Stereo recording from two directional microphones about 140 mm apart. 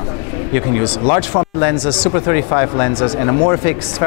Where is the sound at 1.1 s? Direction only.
15° left (ahead or behind).